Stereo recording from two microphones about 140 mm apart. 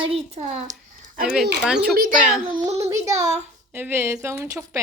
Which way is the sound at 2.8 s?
25° right (ahead or behind).